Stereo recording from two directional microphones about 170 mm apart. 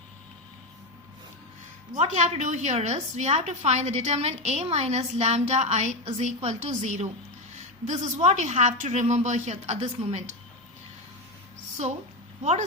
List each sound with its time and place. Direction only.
1.9 s a woman's voice: 45° right (ahead or behind)